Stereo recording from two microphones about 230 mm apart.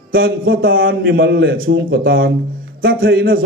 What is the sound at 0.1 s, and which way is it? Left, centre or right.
A man's voice, right.